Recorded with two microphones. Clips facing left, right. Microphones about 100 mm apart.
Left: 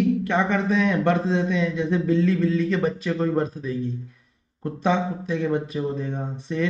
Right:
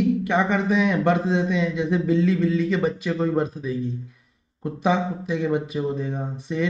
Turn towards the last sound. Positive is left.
turn(degrees=0)  # may be behind; listen again after turning